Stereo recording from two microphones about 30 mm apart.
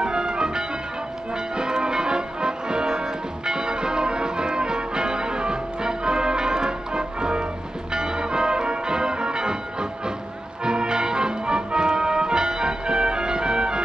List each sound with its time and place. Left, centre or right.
0.0 s music: right